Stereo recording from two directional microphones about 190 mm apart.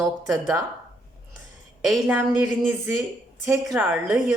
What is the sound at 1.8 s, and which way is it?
Speech, 5° right (ahead or behind).